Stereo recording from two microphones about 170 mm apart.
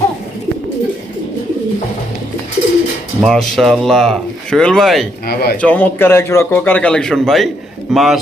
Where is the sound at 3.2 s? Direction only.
Centre (ahead or behind).